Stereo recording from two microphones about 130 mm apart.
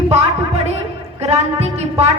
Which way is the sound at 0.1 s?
60° right (ahead or behind).